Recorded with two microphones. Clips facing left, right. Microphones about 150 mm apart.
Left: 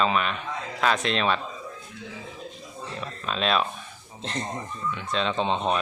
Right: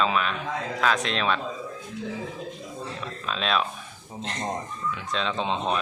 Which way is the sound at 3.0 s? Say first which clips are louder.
Left 4 dB; centre (ahead or behind).